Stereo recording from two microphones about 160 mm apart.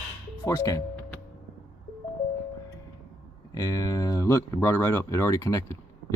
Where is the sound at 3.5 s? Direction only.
20° left (ahead or behind).